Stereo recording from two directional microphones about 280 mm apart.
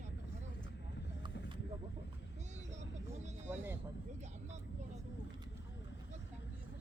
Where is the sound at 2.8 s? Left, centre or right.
Right.